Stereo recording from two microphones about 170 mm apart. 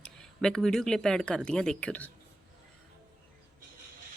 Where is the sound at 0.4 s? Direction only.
5° left (ahead or behind).